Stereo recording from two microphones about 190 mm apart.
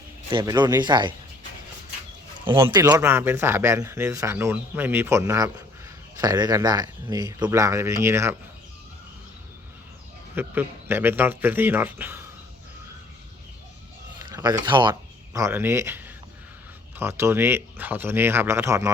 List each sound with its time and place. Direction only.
0.3 s speech: 25° right (ahead or behind)
2.4 s speech: 25° right (ahead or behind)
2.9 s speech: 10° right (ahead or behind)
10.3 s speech: 10° right (ahead or behind)
14.2 s a sound: 15° right (ahead or behind)
14.6 s speech: 25° right (ahead or behind)